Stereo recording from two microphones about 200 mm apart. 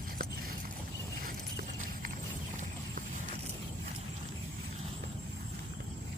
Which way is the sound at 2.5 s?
40° right (ahead or behind).